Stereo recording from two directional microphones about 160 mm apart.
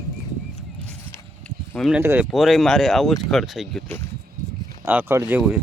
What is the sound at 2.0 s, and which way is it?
Speech, 15° right (ahead or behind).